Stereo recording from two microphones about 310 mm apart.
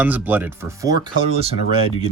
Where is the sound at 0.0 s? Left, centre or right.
Centre.